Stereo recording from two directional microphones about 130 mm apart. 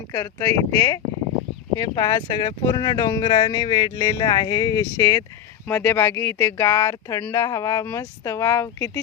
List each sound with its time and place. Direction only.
0.1 s speech: 25° left (ahead or behind)